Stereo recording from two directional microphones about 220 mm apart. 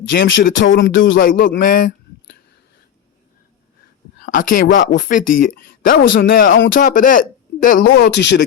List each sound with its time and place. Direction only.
0.0 s a sound: 55° left (ahead or behind)
1.2 s a man's voice: 40° left (ahead or behind)
4.7 s speech: 35° left (ahead or behind)
7.9 s speech: 50° left (ahead or behind)